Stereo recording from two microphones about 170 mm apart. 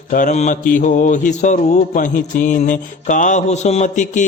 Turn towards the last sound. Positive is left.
turn(degrees=45)  # may be behind; listen again after turning